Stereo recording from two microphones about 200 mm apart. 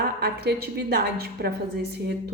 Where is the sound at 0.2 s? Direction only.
50° right (ahead or behind).